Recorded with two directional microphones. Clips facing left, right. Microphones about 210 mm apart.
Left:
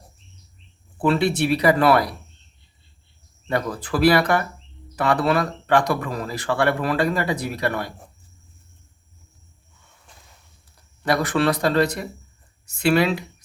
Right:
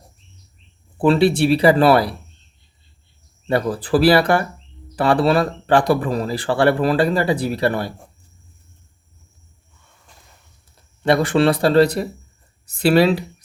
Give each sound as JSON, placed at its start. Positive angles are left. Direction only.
{"t": 0.9, "sound": "speech", "side_deg": -30}
{"t": 3.4, "sound": "speech", "side_deg": -30}
{"t": 10.8, "sound": "speech", "side_deg": -25}